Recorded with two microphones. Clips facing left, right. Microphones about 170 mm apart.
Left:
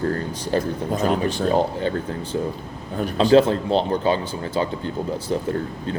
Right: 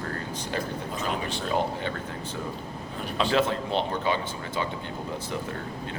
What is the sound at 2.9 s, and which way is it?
Speech, 40° left (ahead or behind).